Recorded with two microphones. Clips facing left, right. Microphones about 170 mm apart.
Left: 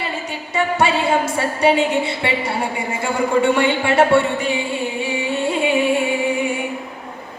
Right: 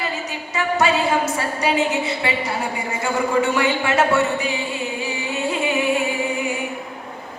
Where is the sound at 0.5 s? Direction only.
30° left (ahead or behind).